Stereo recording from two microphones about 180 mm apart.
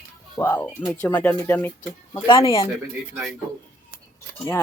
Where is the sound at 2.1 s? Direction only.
25° left (ahead or behind).